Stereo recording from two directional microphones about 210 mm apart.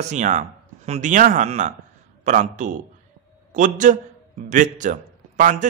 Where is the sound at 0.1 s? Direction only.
35° right (ahead or behind).